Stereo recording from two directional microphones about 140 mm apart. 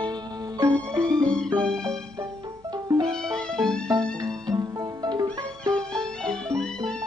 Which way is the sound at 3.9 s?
25° right (ahead or behind).